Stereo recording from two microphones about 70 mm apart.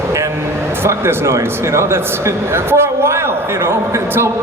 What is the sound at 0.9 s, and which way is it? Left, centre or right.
A man's voice, right.